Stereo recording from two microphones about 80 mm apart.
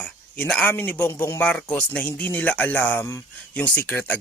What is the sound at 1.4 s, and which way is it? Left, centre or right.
Speech, centre.